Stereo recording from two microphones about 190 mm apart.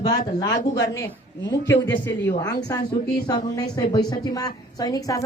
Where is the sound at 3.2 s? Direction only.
20° left (ahead or behind).